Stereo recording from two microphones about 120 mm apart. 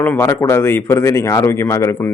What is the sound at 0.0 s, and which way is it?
A man's voice, 20° left (ahead or behind).